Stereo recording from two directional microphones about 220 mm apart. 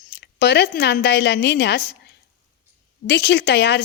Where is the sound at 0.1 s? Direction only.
45° left (ahead or behind).